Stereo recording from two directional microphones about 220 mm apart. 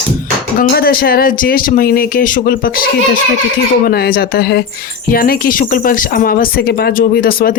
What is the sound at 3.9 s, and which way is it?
A woman's voice, 45° left (ahead or behind).